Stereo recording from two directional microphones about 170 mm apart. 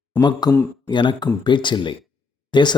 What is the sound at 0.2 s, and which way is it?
Speech, 25° left (ahead or behind).